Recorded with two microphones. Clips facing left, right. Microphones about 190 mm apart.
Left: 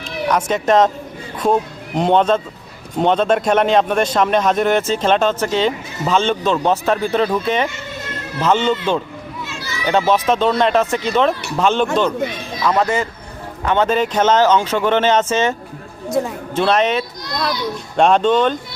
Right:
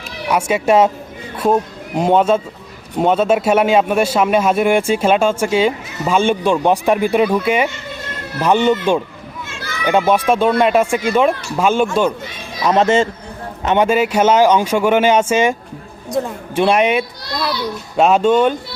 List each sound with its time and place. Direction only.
0.3 s a man's voice: 10° right (ahead or behind)
2.0 s a man's voice: 10° right (ahead or behind)
12.6 s speech: 25° right (ahead or behind)
13.7 s a man's voice: 10° right (ahead or behind)
16.0 s speech: centre (ahead or behind)
16.6 s a man's voice: 10° right (ahead or behind)